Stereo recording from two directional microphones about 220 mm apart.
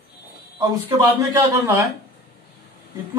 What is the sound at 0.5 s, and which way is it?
A man's voice, 20° right (ahead or behind).